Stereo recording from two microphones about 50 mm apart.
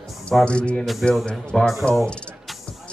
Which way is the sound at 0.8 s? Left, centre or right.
Centre.